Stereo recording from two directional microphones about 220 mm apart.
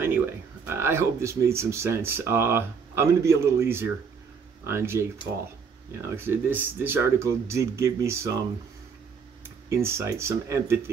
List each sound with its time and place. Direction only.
0.7 s speech: 10° right (ahead or behind)
6.0 s speech: 10° right (ahead or behind)
9.7 s speech: 10° right (ahead or behind)